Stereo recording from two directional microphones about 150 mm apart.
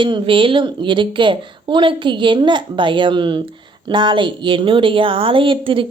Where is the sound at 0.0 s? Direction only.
35° right (ahead or behind).